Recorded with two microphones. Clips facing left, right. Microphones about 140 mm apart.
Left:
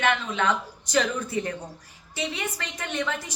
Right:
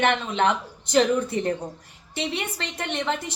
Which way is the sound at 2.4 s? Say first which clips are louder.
Right 2 dB; 25° right (ahead or behind).